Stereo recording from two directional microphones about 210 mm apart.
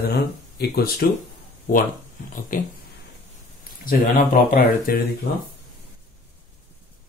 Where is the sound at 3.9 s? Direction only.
45° left (ahead or behind).